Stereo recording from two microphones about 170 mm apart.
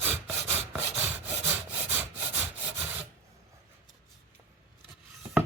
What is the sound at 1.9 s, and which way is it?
Sawing, 10° right (ahead or behind).